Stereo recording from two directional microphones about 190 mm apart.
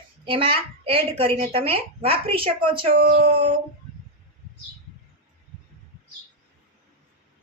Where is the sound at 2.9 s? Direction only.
50° right (ahead or behind).